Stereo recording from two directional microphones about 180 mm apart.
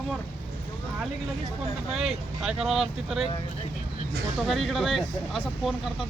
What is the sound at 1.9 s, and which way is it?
Speech, centre (ahead or behind).